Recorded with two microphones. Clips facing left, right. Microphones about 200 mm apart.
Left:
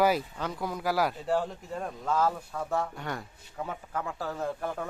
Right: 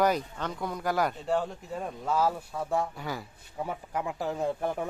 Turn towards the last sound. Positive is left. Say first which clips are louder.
# right 3 dB
turn(degrees=-20)  # may be behind; listen again after turning